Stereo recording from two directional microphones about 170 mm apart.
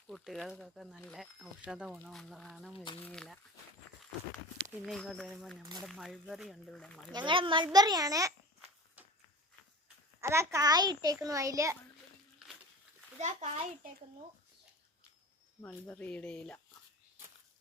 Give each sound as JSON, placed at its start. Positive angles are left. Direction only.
{"t": 0.1, "sound": "speech", "side_deg": 0}
{"t": 4.9, "sound": "speech", "side_deg": 0}
{"t": 7.1, "sound": "a child's voice", "side_deg": -25}
{"t": 9.0, "sound": "a sound", "side_deg": -10}
{"t": 10.2, "sound": "a child's voice", "side_deg": -15}
{"t": 12.4, "sound": "a sound", "side_deg": -5}
{"t": 13.1, "sound": "a child's voice", "side_deg": -45}
{"t": 15.6, "sound": "speech", "side_deg": 10}